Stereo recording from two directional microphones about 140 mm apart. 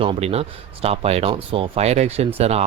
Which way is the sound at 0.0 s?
40° right (ahead or behind).